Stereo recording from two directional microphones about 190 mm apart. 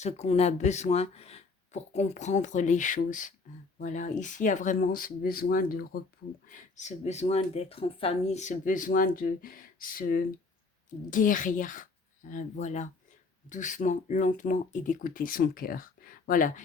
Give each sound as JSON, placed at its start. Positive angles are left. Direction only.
{"t": 0.0, "sound": "speech", "side_deg": 35}
{"t": 6.5, "sound": "speech", "side_deg": 40}